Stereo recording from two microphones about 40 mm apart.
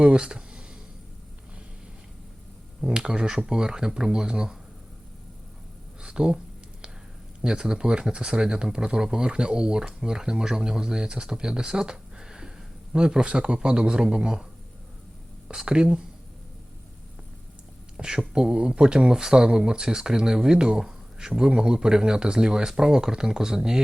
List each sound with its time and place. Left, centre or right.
0.0 s a sound: right
3.0 s speech: centre
6.0 s a sound: right
7.4 s speech: right
15.4 s speech: right
17.9 s speech: centre